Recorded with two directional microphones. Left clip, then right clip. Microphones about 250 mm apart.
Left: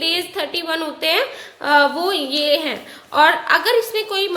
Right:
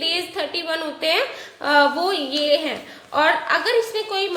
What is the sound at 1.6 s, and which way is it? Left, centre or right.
A woman's voice, centre.